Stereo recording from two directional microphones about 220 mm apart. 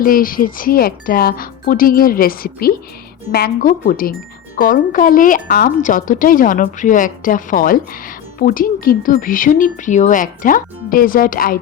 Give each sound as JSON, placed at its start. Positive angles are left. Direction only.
{"t": 0.0, "sound": "a woman's voice", "side_deg": 40}